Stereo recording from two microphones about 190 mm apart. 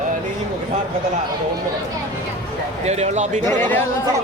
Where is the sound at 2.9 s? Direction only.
35° right (ahead or behind).